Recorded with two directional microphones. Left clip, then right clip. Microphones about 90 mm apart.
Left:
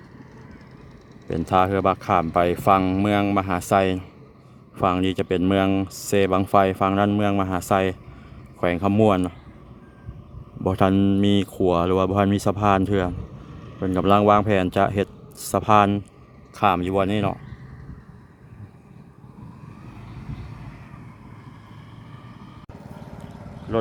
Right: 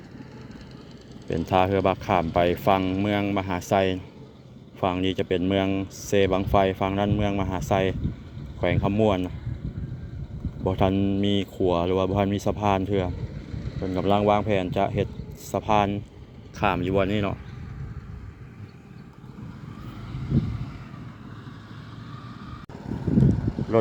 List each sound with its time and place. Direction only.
1.3 s speech: 40° left (ahead or behind)
2.8 s speech: 70° left (ahead or behind)
3.3 s speech: 50° left (ahead or behind)
9.0 s speech: 70° left (ahead or behind)
10.6 s speech: 70° left (ahead or behind)
16.6 s speech: 45° left (ahead or behind)